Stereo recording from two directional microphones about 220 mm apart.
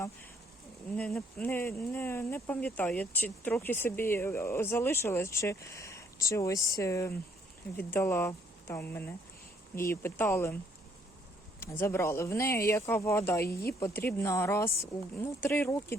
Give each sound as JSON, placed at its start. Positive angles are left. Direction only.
{"t": 0.9, "sound": "speech", "side_deg": 5}
{"t": 11.6, "sound": "speech", "side_deg": 10}
{"t": 13.4, "sound": "speech", "side_deg": 45}
{"t": 13.7, "sound": "speech", "side_deg": 15}